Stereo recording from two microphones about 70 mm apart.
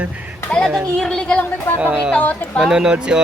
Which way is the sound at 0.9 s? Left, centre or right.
Centre.